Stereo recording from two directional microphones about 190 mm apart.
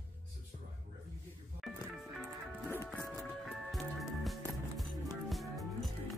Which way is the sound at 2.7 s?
15° left (ahead or behind).